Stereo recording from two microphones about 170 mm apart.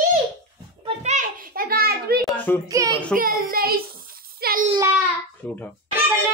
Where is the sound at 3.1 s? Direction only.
60° right (ahead or behind).